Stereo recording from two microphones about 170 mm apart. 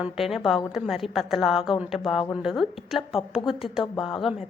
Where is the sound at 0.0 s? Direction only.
Centre (ahead or behind).